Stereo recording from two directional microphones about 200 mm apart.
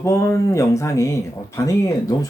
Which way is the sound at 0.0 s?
15° left (ahead or behind).